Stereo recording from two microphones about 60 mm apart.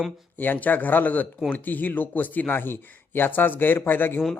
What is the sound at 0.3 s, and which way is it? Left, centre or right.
Speech, left.